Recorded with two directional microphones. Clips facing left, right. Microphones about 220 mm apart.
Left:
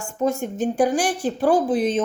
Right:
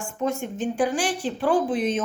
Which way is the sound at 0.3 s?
40° left (ahead or behind).